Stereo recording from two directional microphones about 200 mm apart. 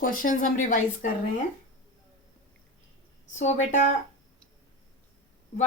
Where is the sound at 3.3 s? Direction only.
35° left (ahead or behind).